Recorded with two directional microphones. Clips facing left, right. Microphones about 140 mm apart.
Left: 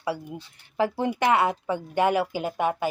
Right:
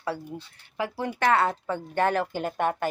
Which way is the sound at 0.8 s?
25° left (ahead or behind).